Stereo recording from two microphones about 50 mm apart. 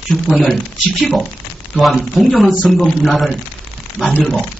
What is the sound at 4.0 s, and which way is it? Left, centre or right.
Speech, centre.